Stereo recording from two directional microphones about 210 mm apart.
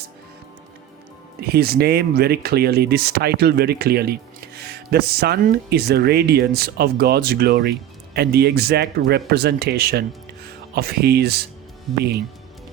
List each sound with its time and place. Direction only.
1.4 s speech: 50° right (ahead or behind)